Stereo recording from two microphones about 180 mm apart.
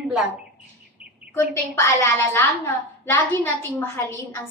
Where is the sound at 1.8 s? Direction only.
15° left (ahead or behind).